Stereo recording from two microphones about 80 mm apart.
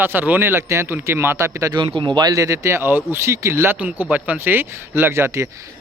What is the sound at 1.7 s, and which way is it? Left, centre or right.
Speech, right.